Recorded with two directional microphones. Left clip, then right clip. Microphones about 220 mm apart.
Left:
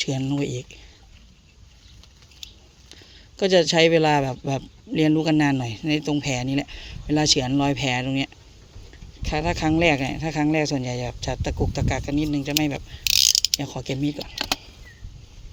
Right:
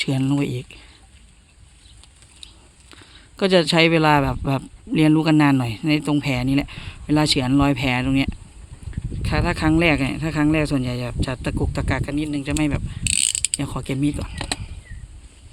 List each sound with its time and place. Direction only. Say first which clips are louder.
0.0 s speech: right 3 dB; 25° right (ahead or behind)
3.0 s speech: right 1 dB; 25° right (ahead or behind)